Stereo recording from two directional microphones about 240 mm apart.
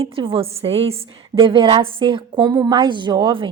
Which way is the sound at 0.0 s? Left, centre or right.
Right.